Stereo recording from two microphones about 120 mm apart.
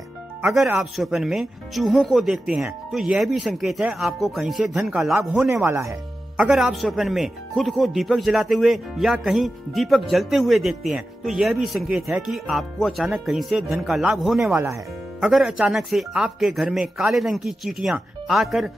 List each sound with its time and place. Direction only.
0.7 s speech: centre (ahead or behind)
5.6 s speech: 25° right (ahead or behind)
6.3 s speech: 5° right (ahead or behind)
14.5 s speech: 20° right (ahead or behind)
15.1 s speech: 5° right (ahead or behind)